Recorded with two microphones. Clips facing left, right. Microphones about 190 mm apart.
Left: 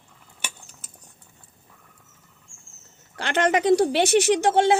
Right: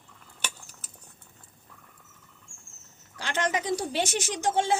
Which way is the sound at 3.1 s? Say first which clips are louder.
Left 7 dB; 65° left (ahead or behind).